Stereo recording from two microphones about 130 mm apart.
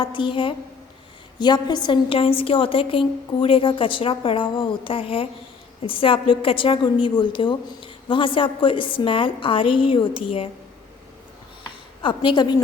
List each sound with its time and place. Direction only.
0.0 s a woman's voice: 40° left (ahead or behind)
12.0 s a woman's voice: 40° left (ahead or behind)